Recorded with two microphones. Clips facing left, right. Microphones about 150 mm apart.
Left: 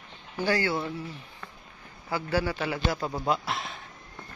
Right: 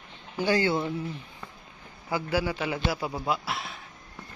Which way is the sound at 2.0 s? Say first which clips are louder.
Even; 15° right (ahead or behind).